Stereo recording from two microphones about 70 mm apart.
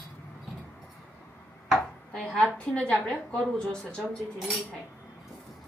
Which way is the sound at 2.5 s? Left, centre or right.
Centre.